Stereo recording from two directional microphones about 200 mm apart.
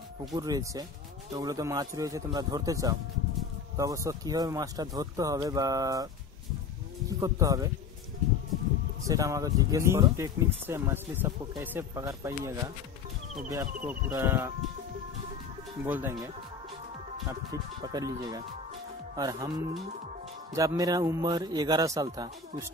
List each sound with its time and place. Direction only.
0.3 s speech: 20° right (ahead or behind)
7.1 s speech: 15° right (ahead or behind)
9.0 s speech: 15° right (ahead or behind)
13.8 s speech: 10° right (ahead or behind)
15.8 s speech: 10° right (ahead or behind)
17.3 s speech: 20° right (ahead or behind)
20.5 s speech: 15° right (ahead or behind)